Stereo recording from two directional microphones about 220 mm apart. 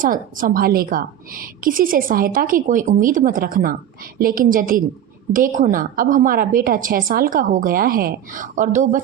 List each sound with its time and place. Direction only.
0.0 s a woman's voice: 40° right (ahead or behind)